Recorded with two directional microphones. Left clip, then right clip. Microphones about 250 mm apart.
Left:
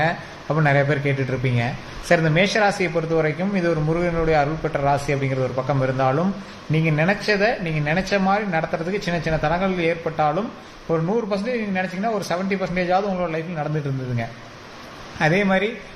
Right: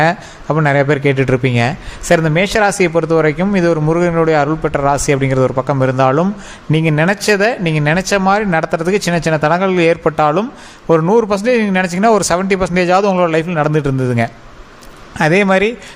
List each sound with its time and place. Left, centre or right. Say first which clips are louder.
0.0 s a man's voice: right 8 dB; right